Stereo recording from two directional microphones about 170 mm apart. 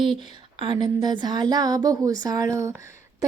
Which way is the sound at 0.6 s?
25° right (ahead or behind).